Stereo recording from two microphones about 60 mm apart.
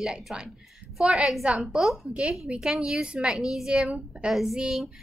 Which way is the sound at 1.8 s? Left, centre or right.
Centre.